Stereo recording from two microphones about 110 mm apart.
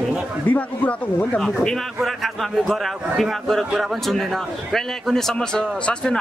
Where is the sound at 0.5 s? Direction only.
15° left (ahead or behind).